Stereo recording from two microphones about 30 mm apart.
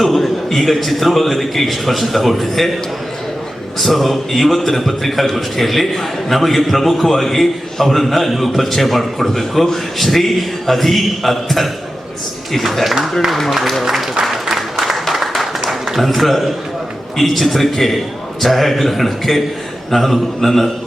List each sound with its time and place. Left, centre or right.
0.0 s a man's voice: centre
3.8 s a man's voice: centre
12.8 s speech: centre
14.4 s applause: centre
15.3 s a sound: centre
16.0 s a man's voice: centre